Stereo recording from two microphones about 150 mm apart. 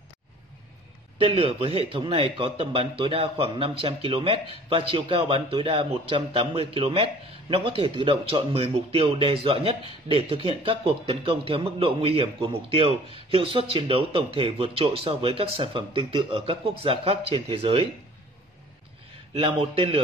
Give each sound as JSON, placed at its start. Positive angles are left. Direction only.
{"t": 1.1, "sound": "a man's voice", "side_deg": -35}
{"t": 19.3, "sound": "a man's voice", "side_deg": -35}